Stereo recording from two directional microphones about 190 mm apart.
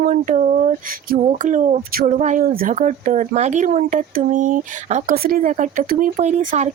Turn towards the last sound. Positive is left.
turn(degrees=-40)  # may be behind; listen again after turning